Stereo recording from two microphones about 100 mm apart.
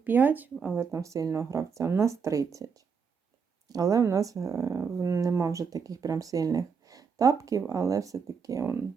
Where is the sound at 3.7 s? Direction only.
35° right (ahead or behind).